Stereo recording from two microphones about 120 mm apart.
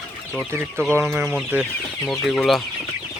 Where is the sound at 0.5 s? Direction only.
20° right (ahead or behind).